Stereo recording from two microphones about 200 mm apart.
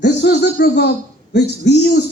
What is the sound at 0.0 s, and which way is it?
A man's voice, 55° left (ahead or behind).